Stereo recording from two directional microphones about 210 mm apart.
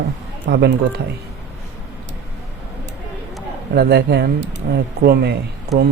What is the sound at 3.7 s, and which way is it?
Speech, 50° right (ahead or behind).